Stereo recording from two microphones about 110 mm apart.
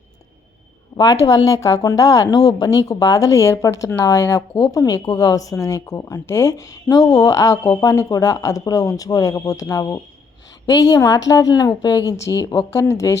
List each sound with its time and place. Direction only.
0.9 s a woman's voice: 35° left (ahead or behind)